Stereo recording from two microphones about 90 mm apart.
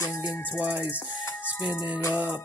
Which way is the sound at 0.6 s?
15° right (ahead or behind).